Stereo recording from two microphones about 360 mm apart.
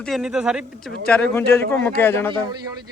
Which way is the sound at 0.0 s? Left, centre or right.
Centre.